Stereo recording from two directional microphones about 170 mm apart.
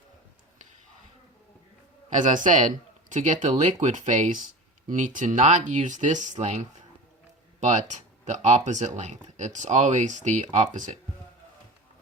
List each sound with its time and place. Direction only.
2.1 s speech: 50° right (ahead or behind)
7.6 s speech: 45° right (ahead or behind)